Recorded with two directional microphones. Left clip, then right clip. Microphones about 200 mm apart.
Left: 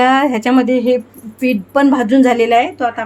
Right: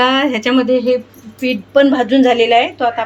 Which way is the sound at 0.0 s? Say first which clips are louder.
Left 1 dB; 45° left (ahead or behind).